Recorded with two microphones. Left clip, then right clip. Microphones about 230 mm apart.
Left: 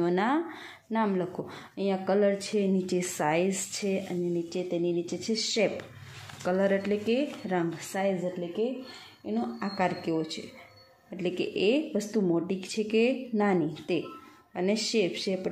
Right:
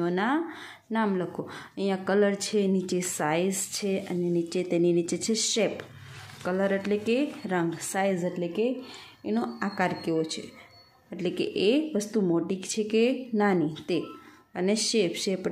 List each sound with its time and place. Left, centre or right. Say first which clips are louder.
0.0 s speech: even; centre
4.5 s speech: right 5 dB; centre
9.2 s speech: right 3 dB; right
9.6 s speech: right 1 dB; centre